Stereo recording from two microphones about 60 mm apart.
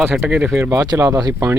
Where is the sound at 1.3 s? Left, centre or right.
Right.